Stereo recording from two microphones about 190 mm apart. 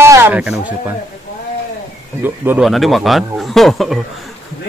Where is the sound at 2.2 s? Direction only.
10° right (ahead or behind).